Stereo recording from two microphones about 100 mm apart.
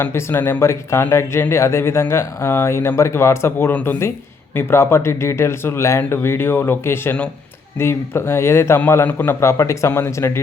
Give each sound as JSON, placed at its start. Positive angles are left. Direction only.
{"t": 0.0, "sound": "speech", "side_deg": 25}